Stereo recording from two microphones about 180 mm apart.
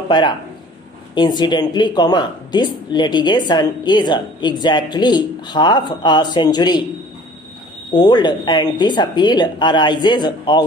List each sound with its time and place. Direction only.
1.1 s speech: 25° left (ahead or behind)
7.9 s speech: 25° left (ahead or behind)